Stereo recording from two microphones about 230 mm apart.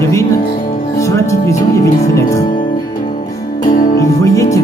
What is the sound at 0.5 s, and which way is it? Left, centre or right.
Music, left.